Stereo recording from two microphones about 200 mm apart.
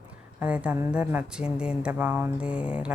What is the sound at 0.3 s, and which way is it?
Speech, 5° right (ahead or behind).